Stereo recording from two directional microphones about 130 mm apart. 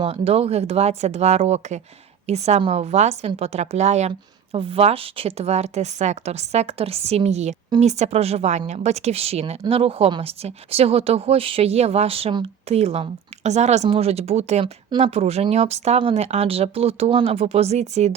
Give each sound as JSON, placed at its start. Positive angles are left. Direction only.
{"t": 0.0, "sound": "a woman's voice", "side_deg": -50}
{"t": 14.6, "sound": "a woman's voice", "side_deg": -40}